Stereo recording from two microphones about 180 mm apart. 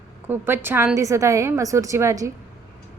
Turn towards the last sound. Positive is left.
turn(degrees=-15)  # may be behind; listen again after turning